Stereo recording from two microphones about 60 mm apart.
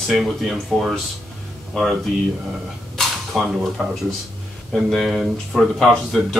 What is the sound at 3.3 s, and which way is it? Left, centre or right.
Speech, centre.